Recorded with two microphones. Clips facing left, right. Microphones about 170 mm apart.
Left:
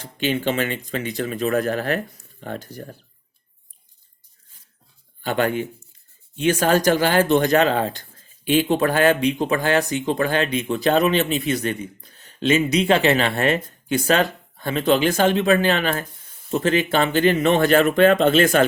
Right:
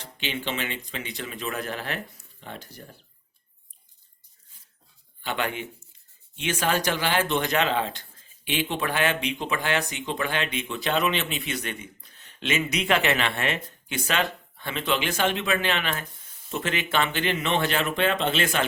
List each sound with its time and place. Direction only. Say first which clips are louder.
0.0 s speech: left 9 dB; 45° left (ahead or behind)
5.2 s speech: left 8 dB; 45° left (ahead or behind)